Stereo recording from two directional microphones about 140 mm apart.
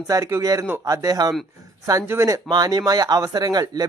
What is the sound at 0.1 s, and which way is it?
Speech, 20° right (ahead or behind).